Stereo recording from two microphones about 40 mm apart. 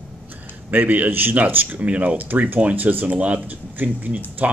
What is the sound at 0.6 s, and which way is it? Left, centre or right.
A man's voice, right.